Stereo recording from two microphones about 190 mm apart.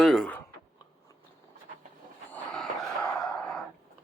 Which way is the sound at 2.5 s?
5° left (ahead or behind).